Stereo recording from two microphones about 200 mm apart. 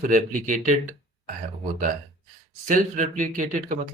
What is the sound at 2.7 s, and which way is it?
Speech, 40° right (ahead or behind).